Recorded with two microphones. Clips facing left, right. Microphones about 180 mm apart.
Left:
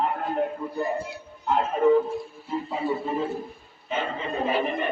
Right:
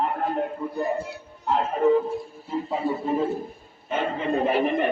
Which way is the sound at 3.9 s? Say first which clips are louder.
Right 4 dB; 55° right (ahead or behind).